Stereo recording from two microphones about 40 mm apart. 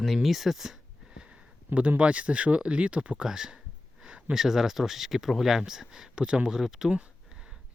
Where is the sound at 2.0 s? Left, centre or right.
Right.